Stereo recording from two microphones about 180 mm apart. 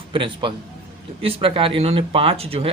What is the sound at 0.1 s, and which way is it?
Speech, 30° right (ahead or behind).